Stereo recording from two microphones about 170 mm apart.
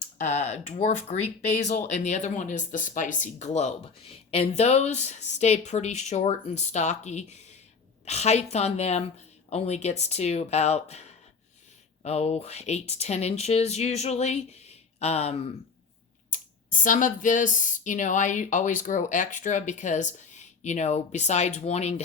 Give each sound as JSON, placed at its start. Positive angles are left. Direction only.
{"t": 0.2, "sound": "speech", "side_deg": 40}
{"t": 12.0, "sound": "speech", "side_deg": 40}
{"t": 16.3, "sound": "speech", "side_deg": 50}